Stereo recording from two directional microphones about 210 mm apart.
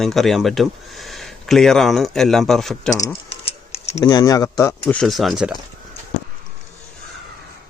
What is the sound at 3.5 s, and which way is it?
Typing, 30° left (ahead or behind).